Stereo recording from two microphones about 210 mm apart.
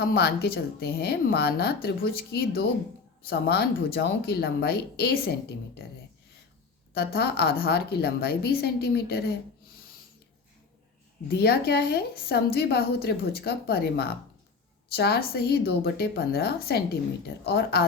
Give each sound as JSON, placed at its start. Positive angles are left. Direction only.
{"t": 0.0, "sound": "a woman's voice", "side_deg": 50}
{"t": 6.9, "sound": "a woman's voice", "side_deg": 50}
{"t": 11.3, "sound": "a woman's voice", "side_deg": 50}